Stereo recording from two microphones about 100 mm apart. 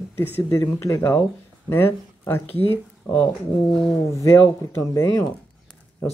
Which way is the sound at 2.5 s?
70° left (ahead or behind).